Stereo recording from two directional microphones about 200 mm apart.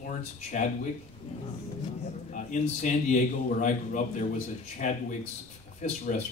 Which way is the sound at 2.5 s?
40° left (ahead or behind).